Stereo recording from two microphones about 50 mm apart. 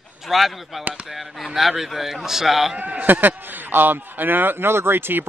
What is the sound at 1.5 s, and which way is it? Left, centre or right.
A man's voice, centre.